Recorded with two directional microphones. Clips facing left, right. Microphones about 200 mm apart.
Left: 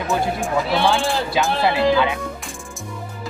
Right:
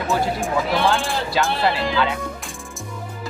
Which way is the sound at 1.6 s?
15° left (ahead or behind).